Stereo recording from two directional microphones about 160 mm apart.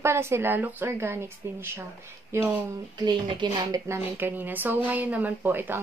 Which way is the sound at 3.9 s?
10° right (ahead or behind).